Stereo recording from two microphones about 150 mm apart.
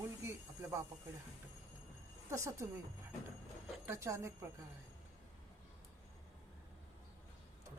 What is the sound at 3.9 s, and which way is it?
Speech, 20° right (ahead or behind).